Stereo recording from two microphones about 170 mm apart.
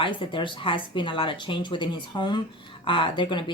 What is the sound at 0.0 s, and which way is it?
Speech, 30° left (ahead or behind).